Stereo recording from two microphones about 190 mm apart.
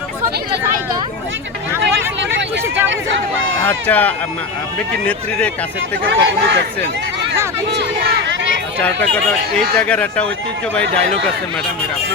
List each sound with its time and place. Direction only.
3.7 s speech: 10° left (ahead or behind)
6.1 s speech: 70° right (ahead or behind)
9.6 s speech: 5° left (ahead or behind)